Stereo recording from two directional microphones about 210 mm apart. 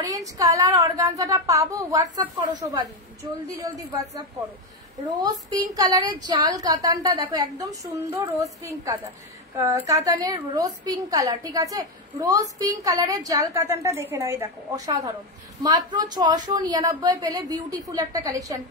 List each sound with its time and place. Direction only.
0.0 s a woman's voice: 15° right (ahead or behind)
3.9 s a woman's voice: 15° right (ahead or behind)